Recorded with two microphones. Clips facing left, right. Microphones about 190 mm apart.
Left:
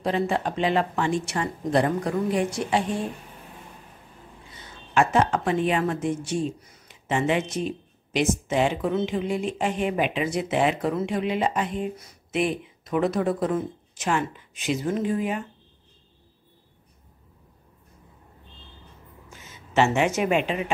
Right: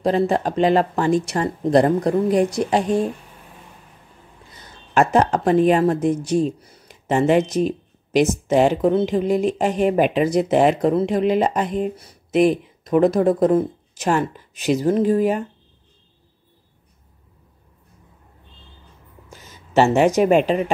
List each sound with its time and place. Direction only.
0.0 s a woman's voice: 40° right (ahead or behind)
4.9 s a woman's voice: 40° right (ahead or behind)
19.3 s speech: 35° right (ahead or behind)